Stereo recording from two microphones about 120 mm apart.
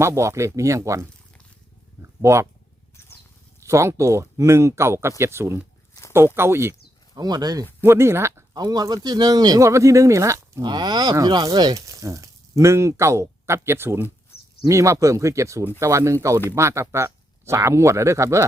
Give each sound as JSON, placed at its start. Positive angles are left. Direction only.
{"t": 0.0, "sound": "speech", "side_deg": -25}
{"t": 2.0, "sound": "a sound", "side_deg": -25}
{"t": 3.6, "sound": "speech", "side_deg": -25}
{"t": 5.9, "sound": "a sound", "side_deg": 25}
{"t": 6.1, "sound": "speech", "side_deg": -20}
{"t": 7.1, "sound": "speech", "side_deg": -35}
{"t": 7.9, "sound": "speech", "side_deg": -20}
{"t": 8.5, "sound": "speech", "side_deg": -35}
{"t": 10.6, "sound": "speech", "side_deg": -40}